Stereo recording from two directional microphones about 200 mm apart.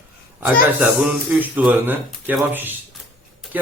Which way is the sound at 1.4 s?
10° right (ahead or behind).